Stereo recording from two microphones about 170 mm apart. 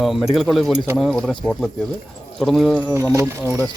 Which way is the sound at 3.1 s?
15° right (ahead or behind).